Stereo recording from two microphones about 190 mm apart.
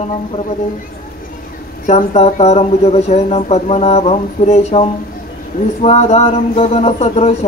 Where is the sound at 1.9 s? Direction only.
35° left (ahead or behind).